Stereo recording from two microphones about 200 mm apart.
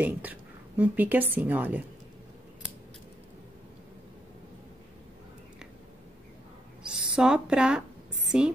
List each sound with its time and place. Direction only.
0.0 s a woman's voice: 10° right (ahead or behind)
7.1 s a woman's voice: 5° right (ahead or behind)